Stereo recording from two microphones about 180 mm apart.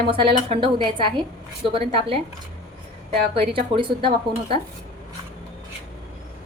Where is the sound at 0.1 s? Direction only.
30° right (ahead or behind).